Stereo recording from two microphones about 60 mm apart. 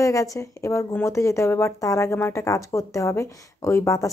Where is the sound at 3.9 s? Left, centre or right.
Left.